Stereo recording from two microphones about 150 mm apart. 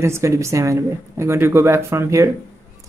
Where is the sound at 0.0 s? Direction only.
20° right (ahead or behind).